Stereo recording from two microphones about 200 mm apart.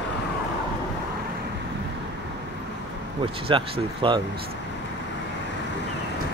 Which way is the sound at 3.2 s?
25° right (ahead or behind).